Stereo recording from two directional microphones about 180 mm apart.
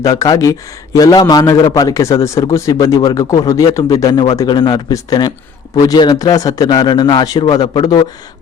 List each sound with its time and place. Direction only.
0.0 s a man's voice: 20° left (ahead or behind)